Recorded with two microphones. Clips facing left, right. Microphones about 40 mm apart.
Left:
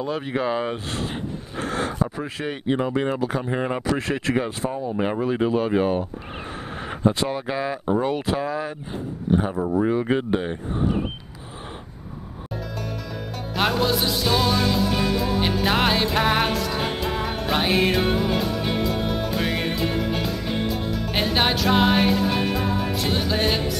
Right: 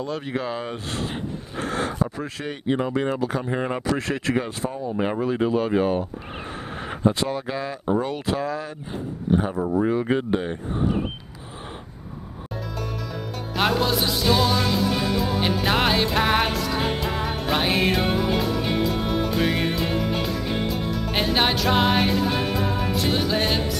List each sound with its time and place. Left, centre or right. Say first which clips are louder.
0.0 s speech: left 3 dB; centre
12.5 s music: even; centre